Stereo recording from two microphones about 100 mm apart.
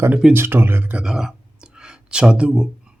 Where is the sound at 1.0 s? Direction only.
5° right (ahead or behind).